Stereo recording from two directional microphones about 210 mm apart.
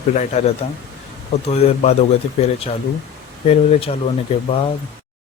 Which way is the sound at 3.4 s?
30° left (ahead or behind).